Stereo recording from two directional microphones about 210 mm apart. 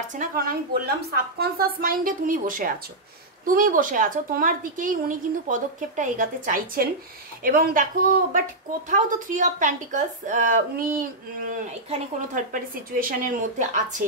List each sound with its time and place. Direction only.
0.1 s a woman's voice: 40° right (ahead or behind)